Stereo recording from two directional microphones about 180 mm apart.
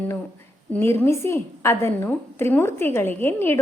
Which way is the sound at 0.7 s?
10° left (ahead or behind).